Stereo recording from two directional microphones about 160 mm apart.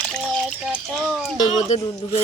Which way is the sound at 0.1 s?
5° left (ahead or behind).